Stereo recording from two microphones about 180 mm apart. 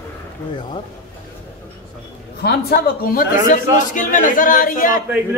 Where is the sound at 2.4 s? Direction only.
65° left (ahead or behind).